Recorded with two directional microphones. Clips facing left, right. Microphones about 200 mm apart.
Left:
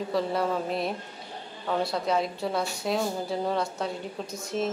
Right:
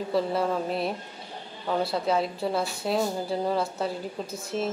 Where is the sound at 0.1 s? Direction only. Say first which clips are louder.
Right 2 dB; centre (ahead or behind).